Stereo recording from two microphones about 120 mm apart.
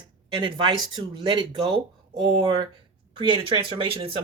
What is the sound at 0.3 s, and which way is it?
Speech, 45° right (ahead or behind).